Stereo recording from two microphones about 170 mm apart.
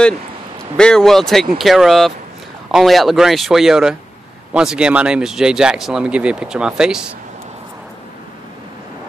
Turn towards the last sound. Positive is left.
turn(degrees=-5)  # may be behind; listen again after turning